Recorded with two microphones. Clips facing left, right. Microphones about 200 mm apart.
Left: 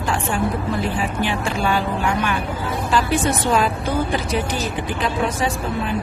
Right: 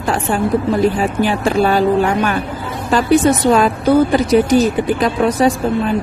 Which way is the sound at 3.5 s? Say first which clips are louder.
Right 8 dB; 45° right (ahead or behind).